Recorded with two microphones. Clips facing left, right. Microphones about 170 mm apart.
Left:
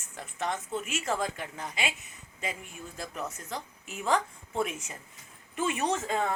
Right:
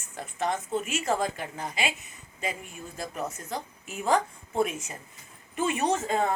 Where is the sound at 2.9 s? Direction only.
40° right (ahead or behind).